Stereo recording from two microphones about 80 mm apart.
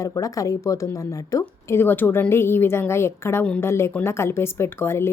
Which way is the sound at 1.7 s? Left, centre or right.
Left.